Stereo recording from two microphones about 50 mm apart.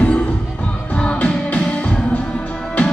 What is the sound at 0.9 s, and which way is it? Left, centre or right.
Music, left.